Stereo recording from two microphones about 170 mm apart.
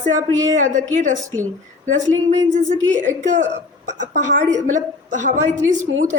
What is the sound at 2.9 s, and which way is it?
A woman's voice, 45° right (ahead or behind).